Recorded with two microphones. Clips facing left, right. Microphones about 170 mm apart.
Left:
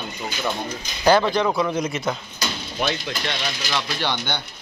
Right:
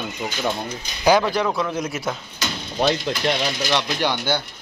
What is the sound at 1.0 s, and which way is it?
A man's voice, 10° right (ahead or behind).